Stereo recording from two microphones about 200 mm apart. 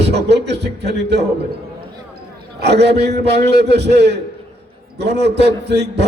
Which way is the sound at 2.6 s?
55° right (ahead or behind).